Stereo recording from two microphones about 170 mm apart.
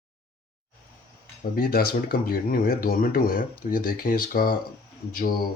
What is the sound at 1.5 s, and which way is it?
Speech, 60° left (ahead or behind).